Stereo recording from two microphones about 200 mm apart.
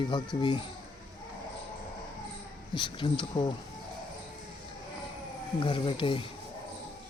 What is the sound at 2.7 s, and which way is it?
Speech, 25° left (ahead or behind).